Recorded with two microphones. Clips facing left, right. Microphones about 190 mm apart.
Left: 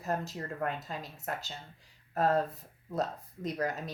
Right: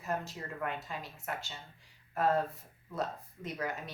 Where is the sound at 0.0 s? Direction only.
40° left (ahead or behind).